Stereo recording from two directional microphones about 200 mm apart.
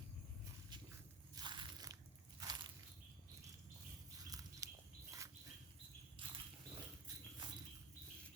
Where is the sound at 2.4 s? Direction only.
20° right (ahead or behind).